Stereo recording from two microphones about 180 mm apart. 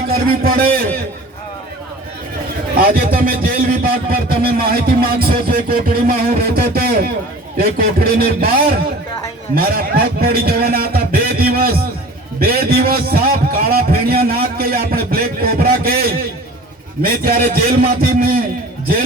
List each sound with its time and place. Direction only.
0.1 s a man's voice: 55° right (ahead or behind)
2.7 s a man's voice: 55° right (ahead or behind)
9.6 s a sound: 55° right (ahead or behind)
17.0 s a man's voice: 55° right (ahead or behind)